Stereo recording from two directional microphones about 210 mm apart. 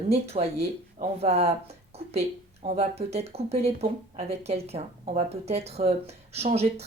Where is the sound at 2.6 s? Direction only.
30° right (ahead or behind).